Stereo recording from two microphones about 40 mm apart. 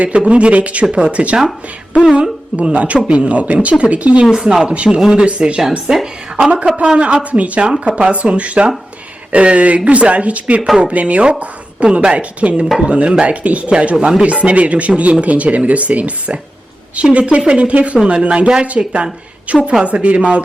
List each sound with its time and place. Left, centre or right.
0.3 s speech: right
4.4 s speech: right
5.2 s speech: right
7.6 s speech: right
18.8 s speech: centre
19.5 s speech: right